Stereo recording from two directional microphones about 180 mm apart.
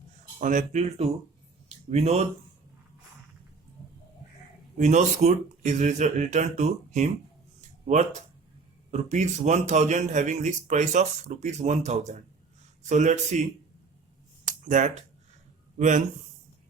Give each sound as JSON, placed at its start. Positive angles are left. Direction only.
{"t": 0.3, "sound": "a man's voice", "side_deg": -45}
{"t": 4.8, "sound": "a man's voice", "side_deg": -40}
{"t": 14.4, "sound": "a sound", "side_deg": -45}
{"t": 15.8, "sound": "speech", "side_deg": -45}